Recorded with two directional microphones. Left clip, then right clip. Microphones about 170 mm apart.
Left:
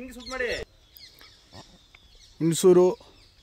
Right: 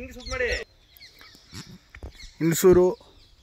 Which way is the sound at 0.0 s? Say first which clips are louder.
Right 2 dB; 25° left (ahead or behind).